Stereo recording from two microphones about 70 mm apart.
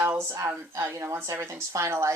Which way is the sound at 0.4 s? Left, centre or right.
Right.